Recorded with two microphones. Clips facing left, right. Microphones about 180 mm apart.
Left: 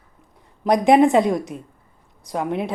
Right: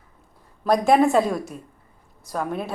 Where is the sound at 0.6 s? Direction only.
20° left (ahead or behind).